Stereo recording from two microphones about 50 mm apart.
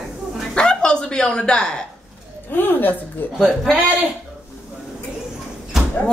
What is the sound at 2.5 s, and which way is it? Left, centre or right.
Speech, left.